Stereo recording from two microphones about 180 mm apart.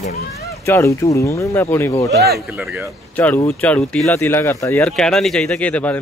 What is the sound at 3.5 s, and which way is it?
Speech, 10° left (ahead or behind).